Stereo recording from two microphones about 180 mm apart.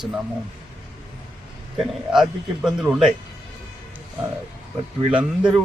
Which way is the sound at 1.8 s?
Centre (ahead or behind).